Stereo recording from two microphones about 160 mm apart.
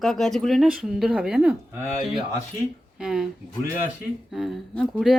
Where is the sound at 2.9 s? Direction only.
5° right (ahead or behind).